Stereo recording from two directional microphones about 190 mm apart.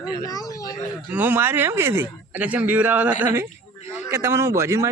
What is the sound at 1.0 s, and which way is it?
Speech, 10° right (ahead or behind).